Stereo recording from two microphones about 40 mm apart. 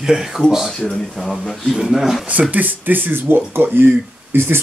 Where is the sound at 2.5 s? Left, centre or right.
Right.